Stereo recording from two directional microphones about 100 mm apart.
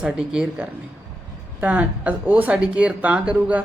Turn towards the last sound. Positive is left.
turn(degrees=-10)  # may be behind; listen again after turning